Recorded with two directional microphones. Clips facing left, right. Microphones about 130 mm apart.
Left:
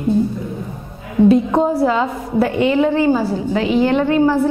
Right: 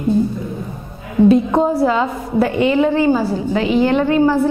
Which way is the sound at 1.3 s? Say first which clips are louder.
Even; 10° right (ahead or behind).